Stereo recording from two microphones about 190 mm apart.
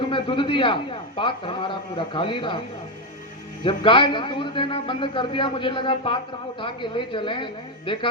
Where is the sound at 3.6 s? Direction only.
25° left (ahead or behind).